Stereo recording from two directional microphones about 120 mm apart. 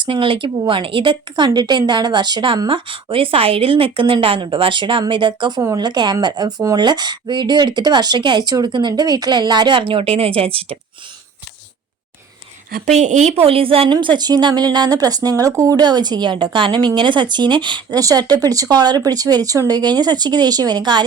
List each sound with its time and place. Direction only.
0.0 s speech: 45° right (ahead or behind)
12.8 s speech: 75° right (ahead or behind); by 21.0 s 40° right (ahead or behind)